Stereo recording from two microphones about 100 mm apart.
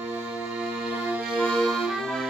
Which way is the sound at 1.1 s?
15° right (ahead or behind).